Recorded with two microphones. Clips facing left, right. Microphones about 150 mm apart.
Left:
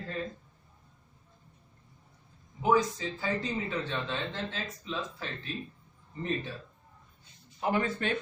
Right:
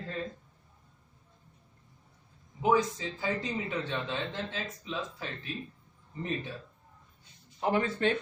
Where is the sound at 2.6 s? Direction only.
20° right (ahead or behind).